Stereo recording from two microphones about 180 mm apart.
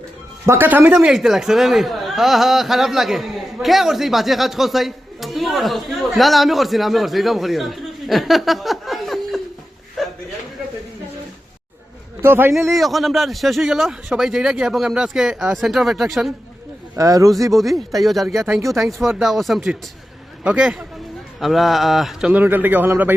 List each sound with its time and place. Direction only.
0.4 s speech: 15° right (ahead or behind)
1.0 s a man's voice: centre (ahead or behind)
10.0 s a sound: centre (ahead or behind)
12.2 s speech: 15° right (ahead or behind)
12.7 s speech: centre (ahead or behind)
16.9 s speech: 20° right (ahead or behind)
17.5 s speech: centre (ahead or behind)